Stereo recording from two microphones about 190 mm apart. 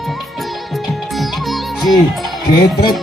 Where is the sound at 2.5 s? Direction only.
55° left (ahead or behind).